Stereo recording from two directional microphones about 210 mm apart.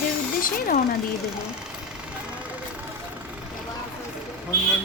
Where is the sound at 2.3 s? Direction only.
5° right (ahead or behind).